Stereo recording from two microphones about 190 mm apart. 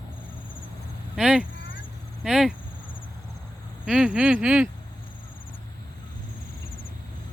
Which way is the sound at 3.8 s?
5° right (ahead or behind).